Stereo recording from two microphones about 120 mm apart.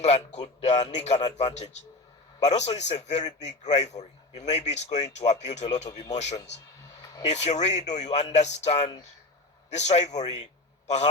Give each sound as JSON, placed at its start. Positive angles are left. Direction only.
{"t": 0.0, "sound": "a man's voice", "side_deg": 65}
{"t": 5.9, "sound": "speech", "side_deg": 35}
{"t": 7.0, "sound": "a sound", "side_deg": 30}
{"t": 7.3, "sound": "a man's voice", "side_deg": 70}